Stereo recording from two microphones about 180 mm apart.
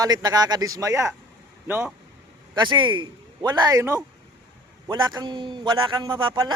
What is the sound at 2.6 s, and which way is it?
Speech, 25° right (ahead or behind).